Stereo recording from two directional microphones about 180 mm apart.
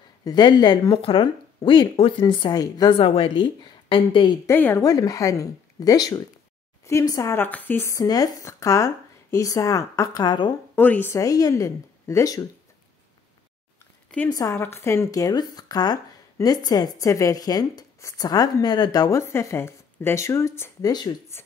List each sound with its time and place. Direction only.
0.2 s speech: 25° left (ahead or behind)
4.5 s speech: 10° left (ahead or behind)
10.8 s speech: 10° left (ahead or behind)
14.3 s speech: 15° left (ahead or behind)